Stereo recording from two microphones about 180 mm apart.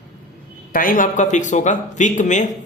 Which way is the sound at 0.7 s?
50° left (ahead or behind).